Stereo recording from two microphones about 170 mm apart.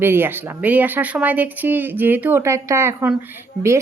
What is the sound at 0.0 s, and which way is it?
Speech, 15° right (ahead or behind).